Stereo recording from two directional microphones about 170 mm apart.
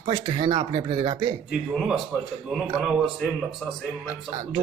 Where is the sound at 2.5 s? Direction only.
Centre (ahead or behind).